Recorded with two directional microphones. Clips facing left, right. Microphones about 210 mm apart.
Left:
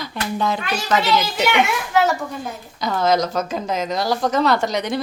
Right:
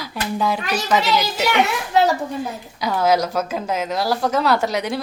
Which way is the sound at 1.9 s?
35° right (ahead or behind).